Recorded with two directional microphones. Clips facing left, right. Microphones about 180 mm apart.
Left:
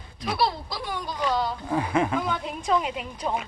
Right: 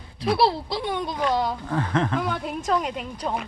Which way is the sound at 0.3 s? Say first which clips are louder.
Right 3 dB; 30° right (ahead or behind).